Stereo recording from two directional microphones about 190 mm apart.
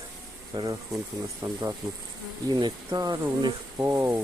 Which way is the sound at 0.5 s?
20° right (ahead or behind).